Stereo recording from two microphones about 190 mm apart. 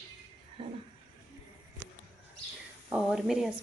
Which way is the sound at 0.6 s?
30° right (ahead or behind).